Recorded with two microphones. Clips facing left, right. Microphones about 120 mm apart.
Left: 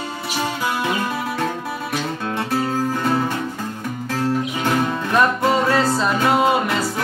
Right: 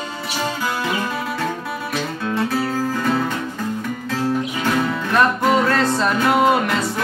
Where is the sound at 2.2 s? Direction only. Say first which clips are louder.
Right 3 dB; 25° left (ahead or behind).